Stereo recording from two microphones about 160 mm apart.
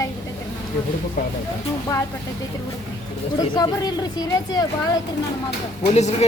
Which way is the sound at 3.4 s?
25° left (ahead or behind).